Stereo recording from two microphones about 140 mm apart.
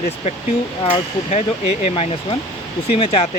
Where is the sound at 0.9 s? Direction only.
50° left (ahead or behind).